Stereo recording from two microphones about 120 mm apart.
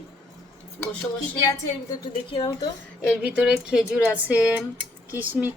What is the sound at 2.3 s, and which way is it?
Speech, 40° left (ahead or behind).